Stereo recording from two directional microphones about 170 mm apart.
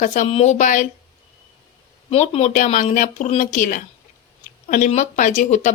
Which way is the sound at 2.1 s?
40° left (ahead or behind).